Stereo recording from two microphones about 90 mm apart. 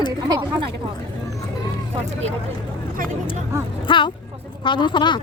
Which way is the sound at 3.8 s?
65° left (ahead or behind).